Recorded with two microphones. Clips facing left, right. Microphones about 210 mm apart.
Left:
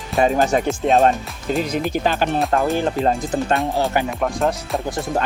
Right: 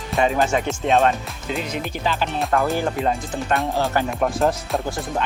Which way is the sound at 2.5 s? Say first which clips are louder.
Right 1 dB; 30° left (ahead or behind).